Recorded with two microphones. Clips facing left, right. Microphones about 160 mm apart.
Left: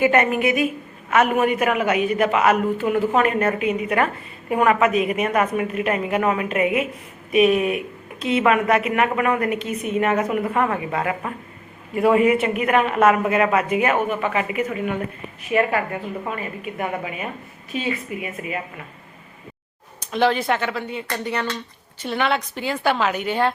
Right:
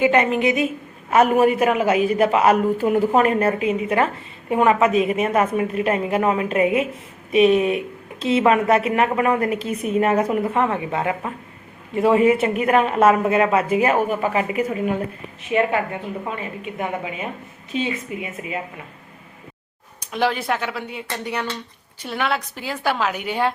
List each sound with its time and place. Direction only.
0.0 s a woman's voice: 15° right (ahead or behind)
1.1 s a woman's voice: 35° right (ahead or behind)
15.4 s a woman's voice: 20° right (ahead or behind)
20.0 s a woman's voice: 10° right (ahead or behind)